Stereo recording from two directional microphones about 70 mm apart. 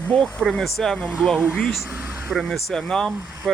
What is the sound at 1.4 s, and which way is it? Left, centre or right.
Speech, centre.